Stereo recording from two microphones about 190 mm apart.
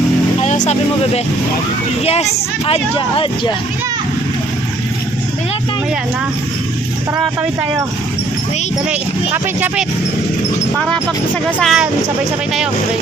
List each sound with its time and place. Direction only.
0.4 s speech: 40° left (ahead or behind)
2.6 s speech: 30° left (ahead or behind)
8.9 s speech: 10° right (ahead or behind)
10.8 s speech: 5° left (ahead or behind)